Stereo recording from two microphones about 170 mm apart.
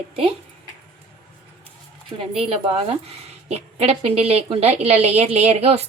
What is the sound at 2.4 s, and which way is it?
A woman's voice, 35° right (ahead or behind).